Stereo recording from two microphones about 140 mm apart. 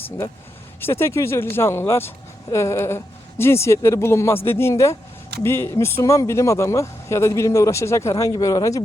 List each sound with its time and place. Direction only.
0.8 s speech: 15° left (ahead or behind)